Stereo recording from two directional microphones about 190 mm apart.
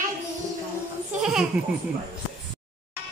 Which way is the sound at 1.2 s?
5° right (ahead or behind).